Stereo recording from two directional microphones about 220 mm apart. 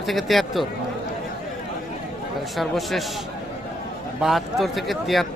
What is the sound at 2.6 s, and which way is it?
Speech, centre (ahead or behind).